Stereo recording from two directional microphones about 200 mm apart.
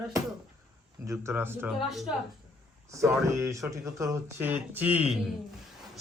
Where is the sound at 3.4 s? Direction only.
15° right (ahead or behind).